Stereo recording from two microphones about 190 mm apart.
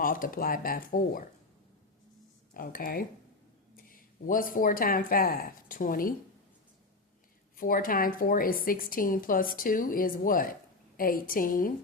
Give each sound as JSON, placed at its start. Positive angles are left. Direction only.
{"t": 0.0, "sound": "a woman's voice", "side_deg": 45}
{"t": 2.5, "sound": "speech", "side_deg": 50}
{"t": 7.5, "sound": "a woman's voice", "side_deg": 45}